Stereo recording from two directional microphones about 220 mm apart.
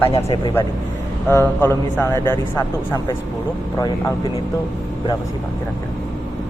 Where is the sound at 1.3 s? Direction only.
10° left (ahead or behind).